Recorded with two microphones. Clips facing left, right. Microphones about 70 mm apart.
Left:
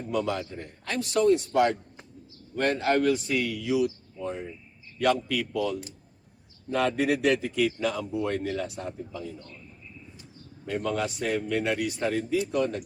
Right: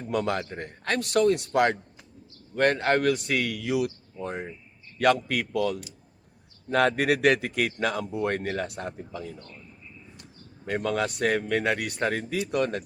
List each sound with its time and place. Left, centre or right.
0.1 s a man's voice: right
10.7 s speech: right